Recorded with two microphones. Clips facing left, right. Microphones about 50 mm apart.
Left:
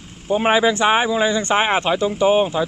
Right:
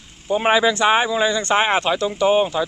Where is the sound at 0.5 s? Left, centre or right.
Left.